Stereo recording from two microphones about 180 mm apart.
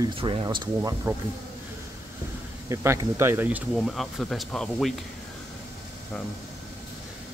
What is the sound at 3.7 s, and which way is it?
Speech, centre (ahead or behind).